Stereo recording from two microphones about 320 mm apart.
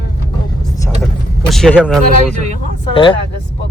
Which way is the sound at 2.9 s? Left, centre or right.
Centre.